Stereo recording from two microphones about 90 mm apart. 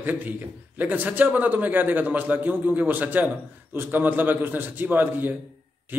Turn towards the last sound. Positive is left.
turn(degrees=-20)  # may be behind; listen again after turning